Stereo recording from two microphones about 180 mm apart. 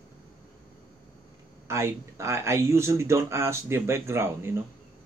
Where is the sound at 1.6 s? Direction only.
15° right (ahead or behind).